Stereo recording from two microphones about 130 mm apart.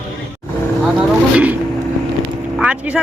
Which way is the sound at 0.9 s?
10° right (ahead or behind).